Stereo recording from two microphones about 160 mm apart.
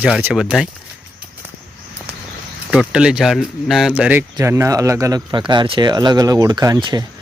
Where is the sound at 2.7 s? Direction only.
5° right (ahead or behind).